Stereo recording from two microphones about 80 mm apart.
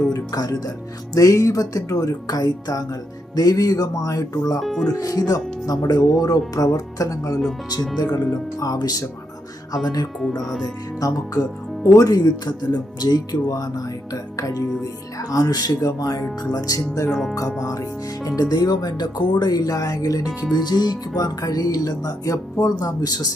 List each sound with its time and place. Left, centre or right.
0.1 s speech: left
4.6 s speech: centre
4.9 s speech: left
7.9 s speech: left
11.0 s speech: left
17.1 s speech: centre
17.6 s speech: left